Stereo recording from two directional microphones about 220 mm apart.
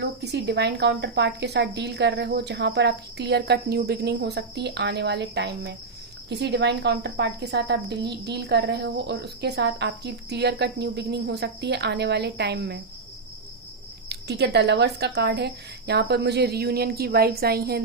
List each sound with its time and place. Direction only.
0.0 s speech: 50° right (ahead or behind)
14.1 s speech: 50° right (ahead or behind)